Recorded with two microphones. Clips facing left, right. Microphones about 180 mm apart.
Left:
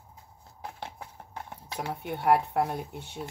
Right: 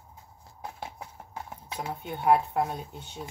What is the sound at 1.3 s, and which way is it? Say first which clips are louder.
Speech: even; 70° left (ahead or behind).